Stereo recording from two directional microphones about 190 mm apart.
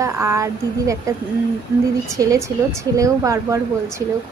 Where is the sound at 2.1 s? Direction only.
15° right (ahead or behind).